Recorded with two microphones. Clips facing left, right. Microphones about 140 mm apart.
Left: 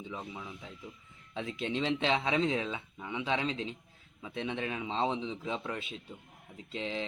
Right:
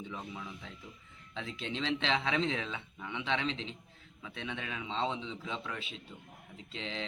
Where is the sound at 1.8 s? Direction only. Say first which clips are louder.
Left 2 dB; 20° left (ahead or behind).